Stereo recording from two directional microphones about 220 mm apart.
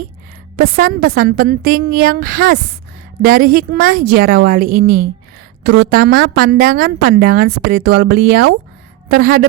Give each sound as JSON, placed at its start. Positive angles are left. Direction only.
{"t": 0.5, "sound": "a woman's voice", "side_deg": -40}